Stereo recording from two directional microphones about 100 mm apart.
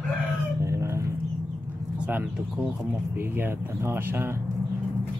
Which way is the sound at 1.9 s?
15° right (ahead or behind).